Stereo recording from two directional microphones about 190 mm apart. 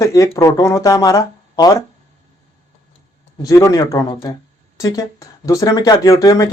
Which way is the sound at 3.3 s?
15° left (ahead or behind).